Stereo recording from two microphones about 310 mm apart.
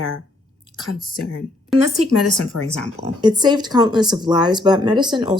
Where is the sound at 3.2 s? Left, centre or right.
Centre.